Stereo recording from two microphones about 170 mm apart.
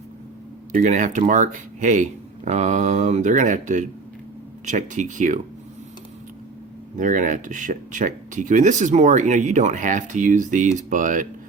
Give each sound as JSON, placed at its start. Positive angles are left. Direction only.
{"t": 0.7, "sound": "speech", "side_deg": -45}
{"t": 6.9, "sound": "speech", "side_deg": -50}